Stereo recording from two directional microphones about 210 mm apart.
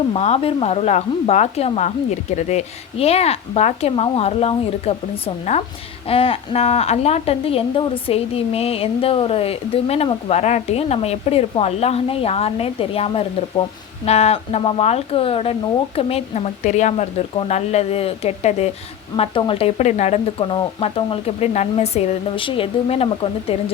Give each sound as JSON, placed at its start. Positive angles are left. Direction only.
{"t": 0.1, "sound": "a woman's voice", "side_deg": 30}